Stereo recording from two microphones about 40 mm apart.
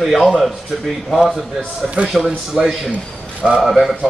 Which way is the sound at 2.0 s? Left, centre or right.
Right.